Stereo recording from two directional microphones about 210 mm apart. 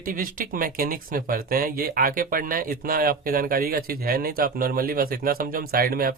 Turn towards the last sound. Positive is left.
turn(degrees=-45)  # may be behind; listen again after turning